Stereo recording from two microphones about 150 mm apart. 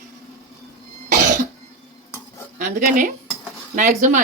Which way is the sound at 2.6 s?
60° right (ahead or behind).